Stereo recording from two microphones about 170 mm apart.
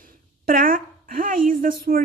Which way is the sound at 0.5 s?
60° right (ahead or behind).